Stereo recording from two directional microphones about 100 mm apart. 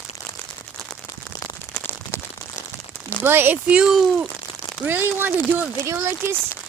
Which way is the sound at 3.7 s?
5° right (ahead or behind).